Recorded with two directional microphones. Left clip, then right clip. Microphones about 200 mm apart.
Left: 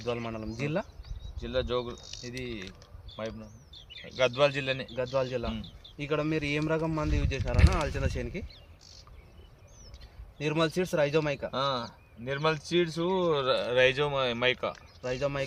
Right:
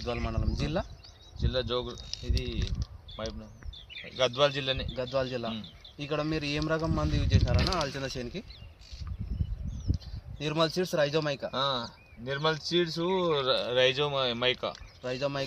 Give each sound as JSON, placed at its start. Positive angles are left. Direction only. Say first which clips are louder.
{"t": 0.0, "sound": "speech", "louder": "left 1 dB", "side_deg": 20}
{"t": 1.4, "sound": "speech", "louder": "left 1 dB", "side_deg": -5}
{"t": 4.2, "sound": "speech", "louder": "left 1 dB", "side_deg": -5}
{"t": 5.1, "sound": "speech", "louder": "even", "side_deg": 20}
{"t": 10.3, "sound": "speech", "louder": "even", "side_deg": 20}
{"t": 11.5, "sound": "speech", "louder": "even", "side_deg": -5}
{"t": 15.0, "sound": "speech", "louder": "left 1 dB", "side_deg": 15}